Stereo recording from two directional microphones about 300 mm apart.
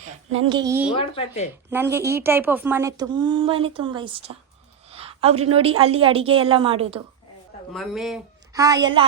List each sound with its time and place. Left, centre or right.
0.0 s a woman's voice: centre
0.9 s speech: centre
1.7 s a woman's voice: centre
7.7 s speech: centre
8.5 s a woman's voice: centre